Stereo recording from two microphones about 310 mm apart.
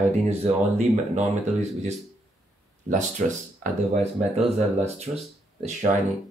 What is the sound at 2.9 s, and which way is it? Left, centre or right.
Speech, right.